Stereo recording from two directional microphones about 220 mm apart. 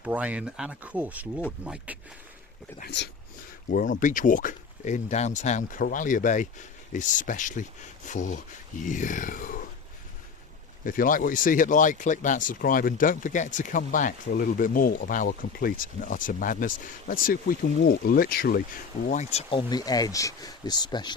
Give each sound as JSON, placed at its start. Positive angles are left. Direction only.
{"t": 0.0, "sound": "speech", "side_deg": -5}
{"t": 2.7, "sound": "speech", "side_deg": 50}
{"t": 10.8, "sound": "speech", "side_deg": 40}
{"t": 19.0, "sound": "speech", "side_deg": 35}